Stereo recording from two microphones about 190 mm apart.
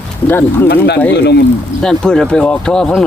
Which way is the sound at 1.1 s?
65° left (ahead or behind).